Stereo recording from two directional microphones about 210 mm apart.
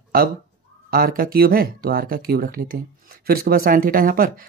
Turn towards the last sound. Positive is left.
turn(degrees=-45)  # may be behind; listen again after turning